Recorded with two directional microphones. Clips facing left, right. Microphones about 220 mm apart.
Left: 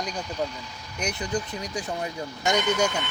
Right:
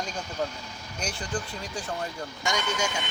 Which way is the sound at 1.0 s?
20° left (ahead or behind).